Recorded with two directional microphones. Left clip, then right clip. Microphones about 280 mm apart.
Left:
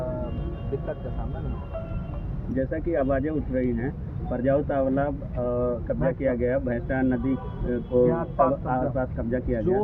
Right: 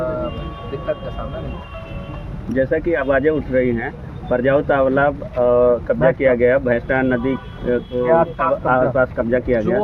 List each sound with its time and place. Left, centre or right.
2.6 s speech: right